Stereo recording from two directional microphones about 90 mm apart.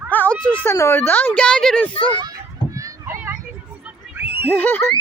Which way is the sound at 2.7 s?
40° right (ahead or behind).